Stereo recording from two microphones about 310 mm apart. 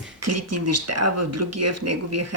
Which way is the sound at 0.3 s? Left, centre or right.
Right.